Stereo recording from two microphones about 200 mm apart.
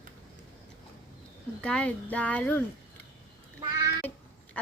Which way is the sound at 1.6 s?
5° left (ahead or behind).